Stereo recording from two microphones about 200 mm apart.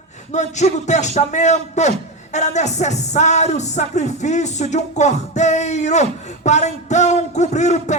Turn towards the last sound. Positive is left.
turn(degrees=35)  # may be behind; listen again after turning